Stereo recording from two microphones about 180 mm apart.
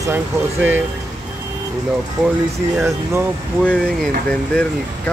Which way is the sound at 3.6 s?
5° left (ahead or behind).